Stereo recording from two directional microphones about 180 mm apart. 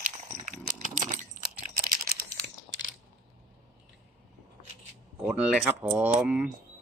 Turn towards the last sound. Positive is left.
turn(degrees=-5)  # may be behind; listen again after turning